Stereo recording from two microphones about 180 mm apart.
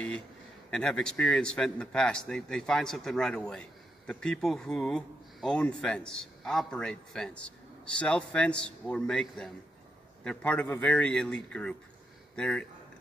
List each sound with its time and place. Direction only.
0.7 s a man's voice: 5° left (ahead or behind)